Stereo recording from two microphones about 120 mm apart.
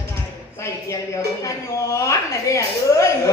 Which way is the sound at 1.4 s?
25° left (ahead or behind).